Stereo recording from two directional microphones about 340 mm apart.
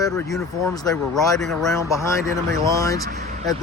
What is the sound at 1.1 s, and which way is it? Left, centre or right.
Speech, centre.